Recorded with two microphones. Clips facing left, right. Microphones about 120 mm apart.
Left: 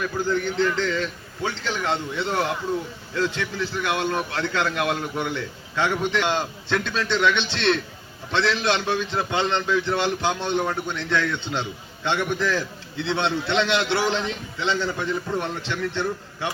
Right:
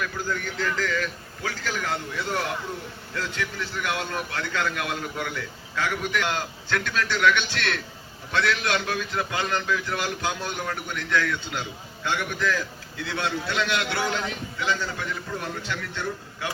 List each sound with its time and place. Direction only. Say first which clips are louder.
0.0 s a man's voice: left 6 dB; 25° left (ahead or behind)